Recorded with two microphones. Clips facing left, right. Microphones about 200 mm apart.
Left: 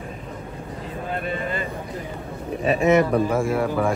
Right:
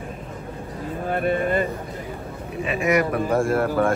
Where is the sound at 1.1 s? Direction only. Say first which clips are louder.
Right 7 dB; 55° right (ahead or behind).